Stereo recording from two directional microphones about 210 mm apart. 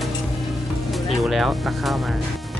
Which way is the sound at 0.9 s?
Centre (ahead or behind).